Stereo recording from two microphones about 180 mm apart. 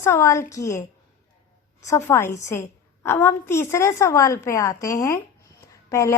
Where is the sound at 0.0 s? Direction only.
15° left (ahead or behind).